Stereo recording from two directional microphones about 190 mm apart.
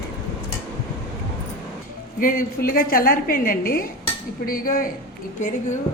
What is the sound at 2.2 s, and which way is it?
A woman's voice, 50° left (ahead or behind).